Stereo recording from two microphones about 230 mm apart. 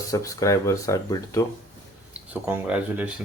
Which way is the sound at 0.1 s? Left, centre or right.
Centre.